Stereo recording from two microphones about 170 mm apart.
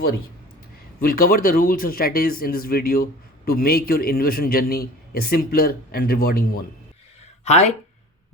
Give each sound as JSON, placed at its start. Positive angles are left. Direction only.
{"t": 1.0, "sound": "speech", "side_deg": 60}
{"t": 7.4, "sound": "speech", "side_deg": 40}